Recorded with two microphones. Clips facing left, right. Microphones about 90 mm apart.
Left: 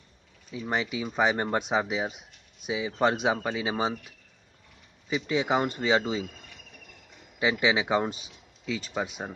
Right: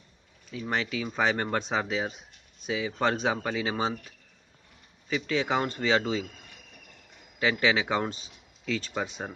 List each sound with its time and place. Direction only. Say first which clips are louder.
0.5 s speech: left 1 dB; 10° left (ahead or behind)
5.1 s speech: left 1 dB; 15° left (ahead or behind)
7.3 s speech: even; 15° left (ahead or behind)